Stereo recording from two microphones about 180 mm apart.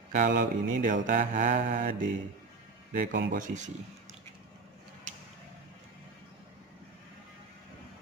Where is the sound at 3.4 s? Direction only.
45° right (ahead or behind).